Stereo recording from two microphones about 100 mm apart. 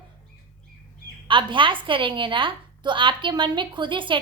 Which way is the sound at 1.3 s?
55° right (ahead or behind).